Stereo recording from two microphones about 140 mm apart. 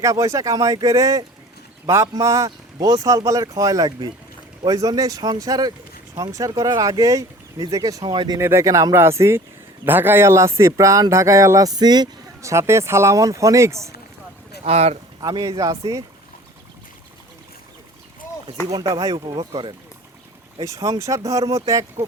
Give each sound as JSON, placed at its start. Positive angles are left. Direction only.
{"t": 0.0, "sound": "speech", "side_deg": -25}
{"t": 8.4, "sound": "speech", "side_deg": -20}
{"t": 14.6, "sound": "speech", "side_deg": -50}
{"t": 15.2, "sound": "speech", "side_deg": -30}
{"t": 18.7, "sound": "speech", "side_deg": -30}
{"t": 20.6, "sound": "speech", "side_deg": -20}